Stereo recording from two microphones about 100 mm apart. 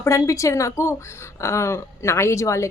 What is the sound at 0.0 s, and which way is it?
A woman's voice, 30° left (ahead or behind).